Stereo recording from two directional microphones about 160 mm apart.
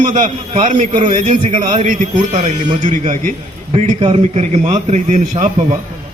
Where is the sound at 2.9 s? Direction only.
55° right (ahead or behind).